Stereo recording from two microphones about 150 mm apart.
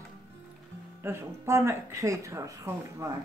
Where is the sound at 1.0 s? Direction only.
15° right (ahead or behind).